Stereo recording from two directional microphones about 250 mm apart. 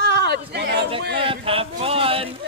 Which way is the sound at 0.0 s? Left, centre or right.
Right.